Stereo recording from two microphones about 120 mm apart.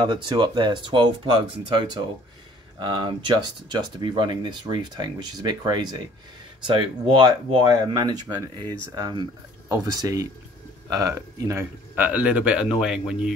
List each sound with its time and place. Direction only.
0.0 s speech: 40° right (ahead or behind)
11.9 s speech: 10° right (ahead or behind)